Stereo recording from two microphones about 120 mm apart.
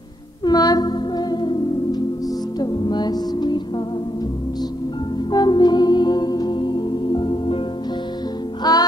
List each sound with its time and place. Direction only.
0.5 s music: 35° left (ahead or behind)
5.3 s music: 35° left (ahead or behind)
8.6 s music: 30° left (ahead or behind)